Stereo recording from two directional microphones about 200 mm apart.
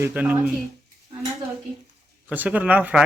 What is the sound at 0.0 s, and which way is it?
Speech, 10° right (ahead or behind).